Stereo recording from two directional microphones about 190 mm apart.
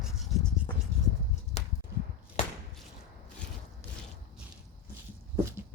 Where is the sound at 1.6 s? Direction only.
35° left (ahead or behind).